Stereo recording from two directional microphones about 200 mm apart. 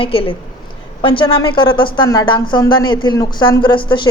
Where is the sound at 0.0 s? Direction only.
25° left (ahead or behind).